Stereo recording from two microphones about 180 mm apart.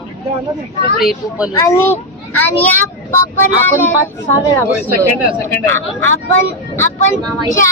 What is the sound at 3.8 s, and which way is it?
Speech, 10° left (ahead or behind).